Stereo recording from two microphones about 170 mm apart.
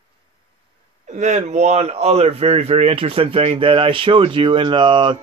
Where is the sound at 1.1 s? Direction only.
45° right (ahead or behind).